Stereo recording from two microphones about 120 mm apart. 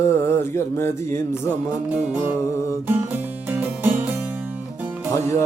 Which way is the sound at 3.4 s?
15° right (ahead or behind).